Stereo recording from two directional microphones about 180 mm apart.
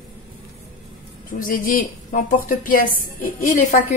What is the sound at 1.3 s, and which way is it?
A woman's voice, 50° left (ahead or behind).